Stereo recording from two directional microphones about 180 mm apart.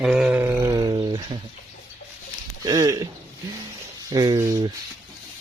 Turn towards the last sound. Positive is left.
turn(degrees=-20)  # may be behind; listen again after turning